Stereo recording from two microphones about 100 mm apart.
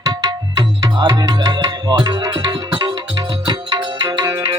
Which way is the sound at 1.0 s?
35° right (ahead or behind).